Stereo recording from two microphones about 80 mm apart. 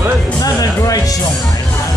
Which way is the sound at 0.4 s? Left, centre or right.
Left.